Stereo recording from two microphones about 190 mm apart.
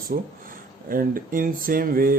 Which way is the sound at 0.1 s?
50° right (ahead or behind).